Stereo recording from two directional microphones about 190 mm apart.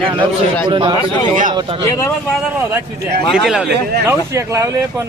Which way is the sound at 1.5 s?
25° right (ahead or behind).